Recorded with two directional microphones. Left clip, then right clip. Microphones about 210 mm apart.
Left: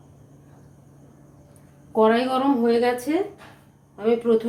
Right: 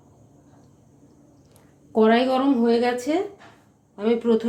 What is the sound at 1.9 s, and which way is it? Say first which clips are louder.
Speech: even; 45° right (ahead or behind).